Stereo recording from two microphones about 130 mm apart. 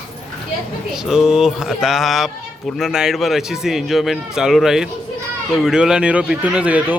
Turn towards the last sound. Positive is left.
turn(degrees=-10)  # may be behind; listen again after turning